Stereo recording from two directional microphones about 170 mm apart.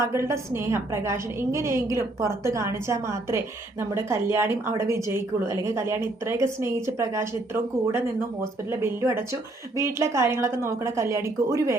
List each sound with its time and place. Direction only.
0.0 s a woman's voice: 15° right (ahead or behind)